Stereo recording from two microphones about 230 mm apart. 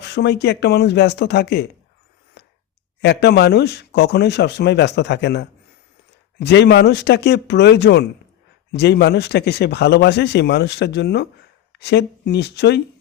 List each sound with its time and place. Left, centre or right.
0.0 s speech: left
2.4 s a sound: left
3.0 s speech: left